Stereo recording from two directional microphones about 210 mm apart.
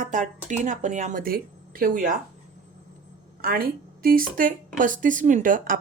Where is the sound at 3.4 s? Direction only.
45° right (ahead or behind).